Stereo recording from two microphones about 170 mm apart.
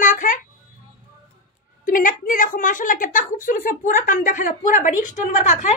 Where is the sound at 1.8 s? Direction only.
55° left (ahead or behind).